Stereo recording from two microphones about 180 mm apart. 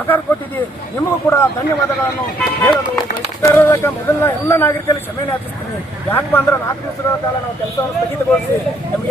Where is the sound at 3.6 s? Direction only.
15° left (ahead or behind).